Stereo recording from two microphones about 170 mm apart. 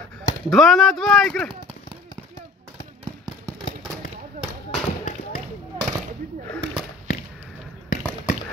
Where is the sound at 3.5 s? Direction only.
20° right (ahead or behind).